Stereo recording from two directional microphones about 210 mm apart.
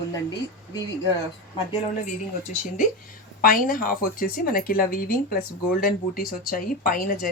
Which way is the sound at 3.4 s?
45° left (ahead or behind).